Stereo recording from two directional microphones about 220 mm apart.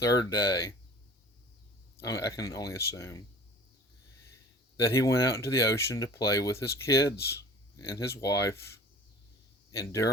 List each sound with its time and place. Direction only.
0.0 s speech: 15° left (ahead or behind)
2.0 s speech: 15° left (ahead or behind)
4.9 s speech: 15° left (ahead or behind)
9.7 s speech: 15° left (ahead or behind)